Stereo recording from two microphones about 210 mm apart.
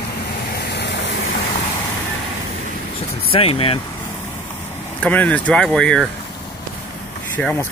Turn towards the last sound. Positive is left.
turn(degrees=5)  # may be behind; listen again after turning